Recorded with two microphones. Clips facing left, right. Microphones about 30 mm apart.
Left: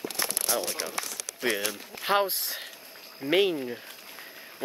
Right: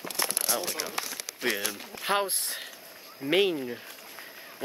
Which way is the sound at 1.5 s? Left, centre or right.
Centre.